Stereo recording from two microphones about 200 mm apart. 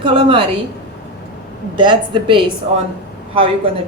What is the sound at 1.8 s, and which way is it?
Speech, 25° right (ahead or behind).